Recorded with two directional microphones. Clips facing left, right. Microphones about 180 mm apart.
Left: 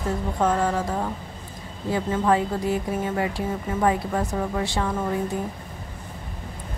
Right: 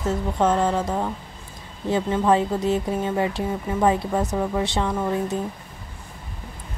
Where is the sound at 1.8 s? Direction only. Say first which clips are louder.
Right 2 dB; 25° right (ahead or behind).